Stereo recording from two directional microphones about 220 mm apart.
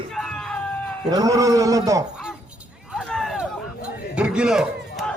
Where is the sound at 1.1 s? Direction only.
15° right (ahead or behind).